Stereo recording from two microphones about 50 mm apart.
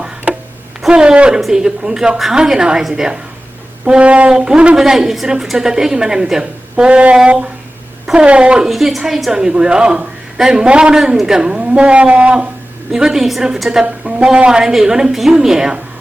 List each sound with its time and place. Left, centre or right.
0.9 s a woman's voice: centre
1.4 s a woman's voice: centre
3.8 s a woman's voice: right
8.6 s a woman's voice: centre
10.9 s a woman's voice: centre; by 12.5 s right
12.9 s a woman's voice: centre